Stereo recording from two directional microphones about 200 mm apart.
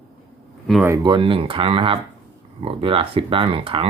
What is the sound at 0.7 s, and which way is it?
Speech, 10° right (ahead or behind).